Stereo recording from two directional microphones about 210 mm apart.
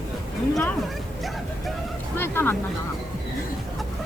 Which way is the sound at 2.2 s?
10° left (ahead or behind).